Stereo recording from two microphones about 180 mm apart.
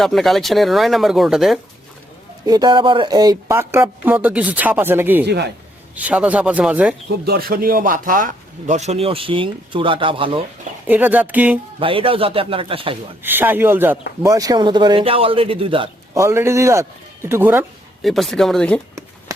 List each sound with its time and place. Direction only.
0.0 s speech: centre (ahead or behind)
2.5 s speech: 25° right (ahead or behind)
5.2 s a man's voice: 70° right (ahead or behind)
6.0 s speech: 10° right (ahead or behind)
7.3 s speech: 55° right (ahead or behind); by 10.4 s 30° right (ahead or behind)
10.8 s speech: 10° right (ahead or behind)
11.8 s speech: 30° right (ahead or behind)
13.2 s a man's voice: 10° right (ahead or behind); by 15.9 s 30° right (ahead or behind)
16.1 s speech: 15° right (ahead or behind)
18.0 s speech: centre (ahead or behind)